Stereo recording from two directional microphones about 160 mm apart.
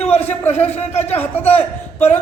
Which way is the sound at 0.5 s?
40° left (ahead or behind).